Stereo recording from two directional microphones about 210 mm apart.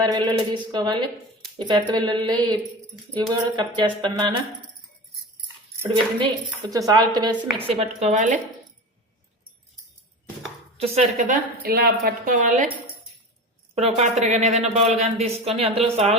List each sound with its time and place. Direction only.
0.0 s a woman's voice: 20° right (ahead or behind)
6.1 s a woman's voice: 20° right (ahead or behind); by 8.4 s 35° right (ahead or behind)
10.8 s a woman's voice: 30° right (ahead or behind)
11.6 s a woman's voice: 45° right (ahead or behind)
13.7 s a woman's voice: 30° right (ahead or behind)